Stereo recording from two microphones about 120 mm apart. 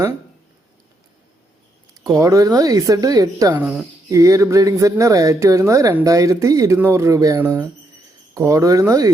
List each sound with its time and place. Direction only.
2.0 s speech: 25° right (ahead or behind)
3.6 s speech: 15° right (ahead or behind)
4.1 s speech: 25° right (ahead or behind)